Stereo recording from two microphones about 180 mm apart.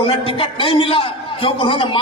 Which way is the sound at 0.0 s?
30° left (ahead or behind).